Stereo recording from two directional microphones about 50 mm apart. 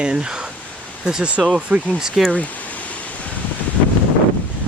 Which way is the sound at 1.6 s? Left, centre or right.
Right.